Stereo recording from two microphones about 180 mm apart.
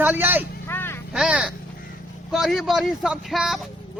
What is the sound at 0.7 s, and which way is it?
Vehicle, 10° left (ahead or behind).